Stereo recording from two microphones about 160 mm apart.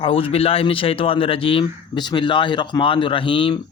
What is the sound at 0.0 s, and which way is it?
Speech, 35° left (ahead or behind).